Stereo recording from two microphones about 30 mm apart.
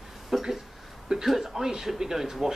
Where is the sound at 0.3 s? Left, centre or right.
Centre.